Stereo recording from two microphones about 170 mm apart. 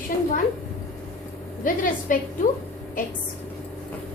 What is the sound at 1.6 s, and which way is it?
Speech, 55° left (ahead or behind).